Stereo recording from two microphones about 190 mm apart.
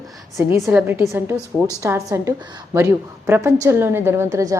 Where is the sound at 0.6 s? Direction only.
5° right (ahead or behind).